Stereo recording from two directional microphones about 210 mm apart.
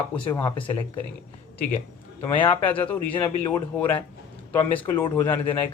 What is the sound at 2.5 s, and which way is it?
Speech, 5° left (ahead or behind).